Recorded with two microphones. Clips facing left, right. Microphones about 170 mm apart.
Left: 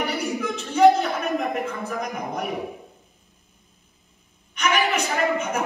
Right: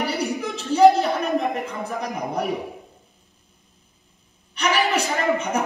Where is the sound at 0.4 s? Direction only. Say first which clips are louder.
Right 2 dB; 35° right (ahead or behind).